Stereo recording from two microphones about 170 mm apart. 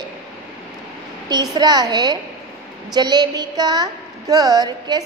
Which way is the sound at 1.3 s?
25° right (ahead or behind).